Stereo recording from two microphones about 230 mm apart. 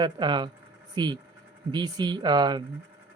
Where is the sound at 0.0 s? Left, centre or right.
Centre.